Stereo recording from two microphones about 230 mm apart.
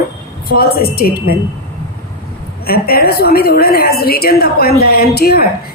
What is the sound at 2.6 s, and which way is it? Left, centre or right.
A woman's voice, left.